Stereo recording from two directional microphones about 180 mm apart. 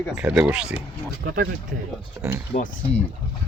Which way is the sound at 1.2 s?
45° right (ahead or behind).